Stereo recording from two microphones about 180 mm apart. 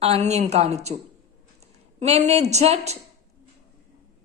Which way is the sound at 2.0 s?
35° right (ahead or behind).